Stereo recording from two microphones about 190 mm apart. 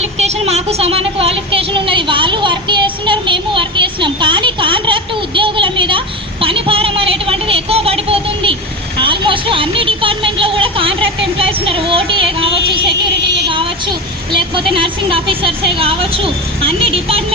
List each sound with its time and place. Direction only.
0.0 s speech: 35° right (ahead or behind)
12.9 s speech: 65° right (ahead or behind)
13.5 s speech: 25° right (ahead or behind)